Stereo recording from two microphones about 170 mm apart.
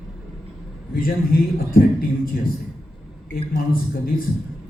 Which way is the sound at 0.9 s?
60° left (ahead or behind).